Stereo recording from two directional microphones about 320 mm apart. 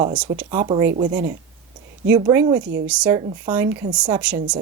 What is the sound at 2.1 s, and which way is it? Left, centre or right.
A woman's voice, centre.